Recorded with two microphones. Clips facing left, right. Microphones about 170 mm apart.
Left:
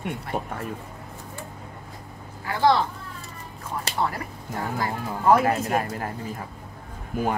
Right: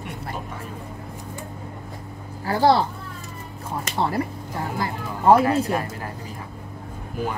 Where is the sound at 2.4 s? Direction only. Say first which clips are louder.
Right 3 dB; 35° right (ahead or behind).